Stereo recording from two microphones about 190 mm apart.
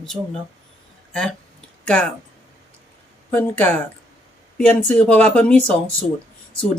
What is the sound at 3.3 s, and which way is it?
Speech, 10° left (ahead or behind).